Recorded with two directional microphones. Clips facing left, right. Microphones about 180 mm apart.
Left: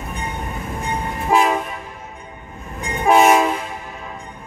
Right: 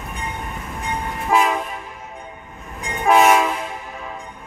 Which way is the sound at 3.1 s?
35° left (ahead or behind).